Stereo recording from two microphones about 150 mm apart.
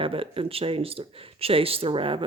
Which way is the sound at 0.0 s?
35° right (ahead or behind).